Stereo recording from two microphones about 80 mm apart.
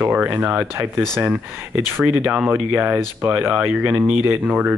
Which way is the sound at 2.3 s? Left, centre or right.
Centre.